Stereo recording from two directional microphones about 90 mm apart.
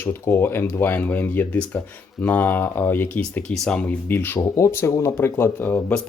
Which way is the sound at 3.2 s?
10° left (ahead or behind).